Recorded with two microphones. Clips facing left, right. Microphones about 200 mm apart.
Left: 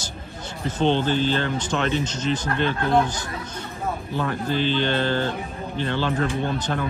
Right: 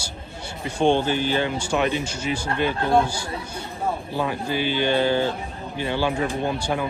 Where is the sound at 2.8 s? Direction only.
30° right (ahead or behind).